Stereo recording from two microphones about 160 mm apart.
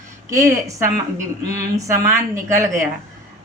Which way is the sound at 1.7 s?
20° right (ahead or behind).